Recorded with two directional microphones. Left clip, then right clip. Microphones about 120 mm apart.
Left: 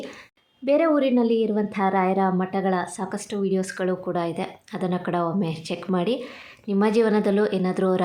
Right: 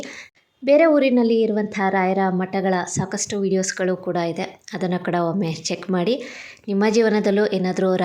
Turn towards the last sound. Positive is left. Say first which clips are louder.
# right 2 dB
turn(degrees=-10)  # may be behind; listen again after turning